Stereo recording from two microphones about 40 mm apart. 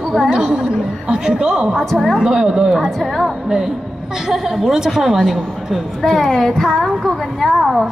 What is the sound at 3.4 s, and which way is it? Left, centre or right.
A woman's voice, centre.